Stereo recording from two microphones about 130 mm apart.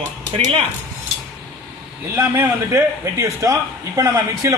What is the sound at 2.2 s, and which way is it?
A man's voice, 15° right (ahead or behind).